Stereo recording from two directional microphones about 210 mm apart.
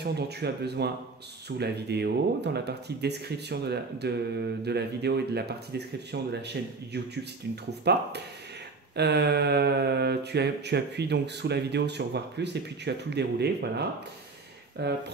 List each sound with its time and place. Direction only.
0.0 s mantra: 50° right (ahead or behind)